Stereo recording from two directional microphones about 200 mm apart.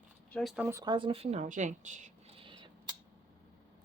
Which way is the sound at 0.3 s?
Centre (ahead or behind).